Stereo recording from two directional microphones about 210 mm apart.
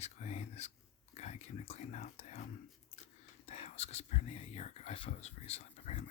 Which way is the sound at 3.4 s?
30° left (ahead or behind).